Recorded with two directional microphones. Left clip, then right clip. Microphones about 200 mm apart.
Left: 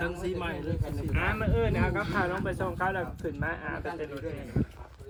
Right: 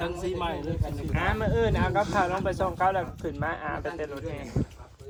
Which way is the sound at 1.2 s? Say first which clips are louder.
Right 3 dB; 35° right (ahead or behind).